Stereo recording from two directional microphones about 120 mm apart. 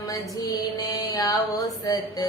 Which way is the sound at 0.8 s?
30° left (ahead or behind).